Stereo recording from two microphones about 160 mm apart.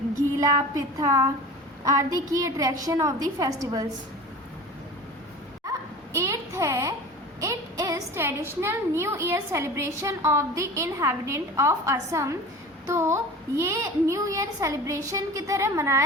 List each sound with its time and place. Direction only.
0.3 s a child's voice: 20° right (ahead or behind)
6.1 s a woman's voice: 20° right (ahead or behind)